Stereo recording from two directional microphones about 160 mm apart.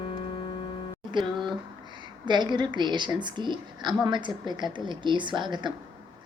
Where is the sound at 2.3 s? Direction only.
30° right (ahead or behind).